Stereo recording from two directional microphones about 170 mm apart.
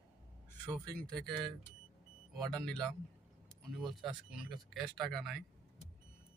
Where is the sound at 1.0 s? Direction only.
Centre (ahead or behind).